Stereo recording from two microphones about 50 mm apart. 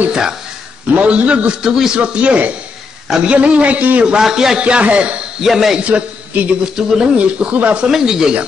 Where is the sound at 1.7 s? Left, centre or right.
Centre.